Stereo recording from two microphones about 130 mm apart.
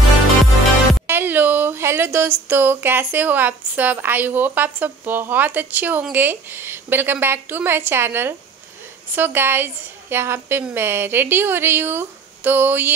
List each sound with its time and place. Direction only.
1.0 s speech: 15° right (ahead or behind)